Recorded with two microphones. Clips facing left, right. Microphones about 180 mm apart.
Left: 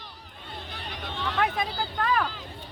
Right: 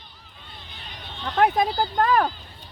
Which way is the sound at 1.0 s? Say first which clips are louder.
Left 1 dB; 60° left (ahead or behind).